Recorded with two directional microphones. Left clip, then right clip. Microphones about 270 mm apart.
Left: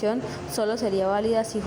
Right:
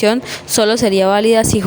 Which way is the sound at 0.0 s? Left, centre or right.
Right.